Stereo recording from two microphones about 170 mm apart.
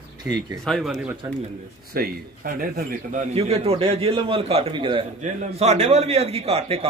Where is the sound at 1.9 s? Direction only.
60° right (ahead or behind); by 6.9 s 35° right (ahead or behind).